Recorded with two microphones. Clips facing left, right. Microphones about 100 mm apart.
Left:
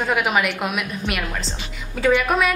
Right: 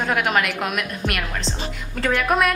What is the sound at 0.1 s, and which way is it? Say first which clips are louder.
Speech: left 1 dB; 5° left (ahead or behind).